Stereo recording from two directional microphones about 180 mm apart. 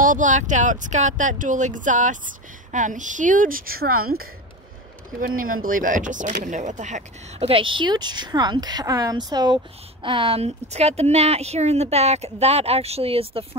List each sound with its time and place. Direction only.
0.0 s speech: 45° right (ahead or behind)
5.2 s speech: 50° right (ahead or behind); by 13.6 s 30° right (ahead or behind)